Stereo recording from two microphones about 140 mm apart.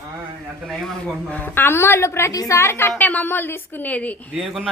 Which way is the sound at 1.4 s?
15° left (ahead or behind).